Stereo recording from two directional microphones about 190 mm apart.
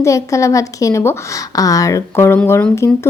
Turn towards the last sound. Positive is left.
turn(degrees=15)  # may be behind; listen again after turning